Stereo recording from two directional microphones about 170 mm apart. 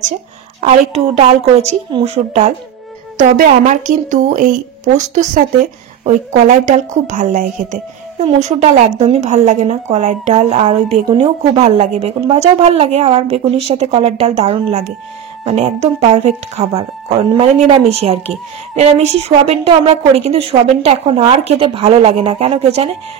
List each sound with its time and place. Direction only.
0.6 s a woman's voice: 40° right (ahead or behind)